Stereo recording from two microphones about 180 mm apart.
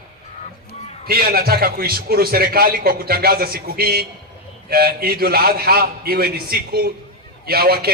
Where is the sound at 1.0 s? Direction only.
60° right (ahead or behind).